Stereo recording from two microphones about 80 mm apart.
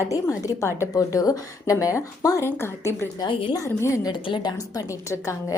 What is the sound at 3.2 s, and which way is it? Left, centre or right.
Speech, left.